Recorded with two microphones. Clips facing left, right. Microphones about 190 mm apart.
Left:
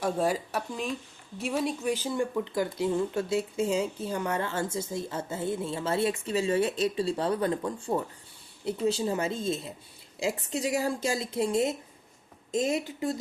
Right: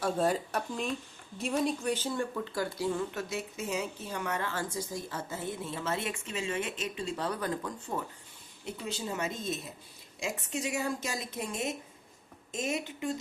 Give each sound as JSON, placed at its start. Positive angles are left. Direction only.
{"t": 0.0, "sound": "a woman's voice", "side_deg": 10}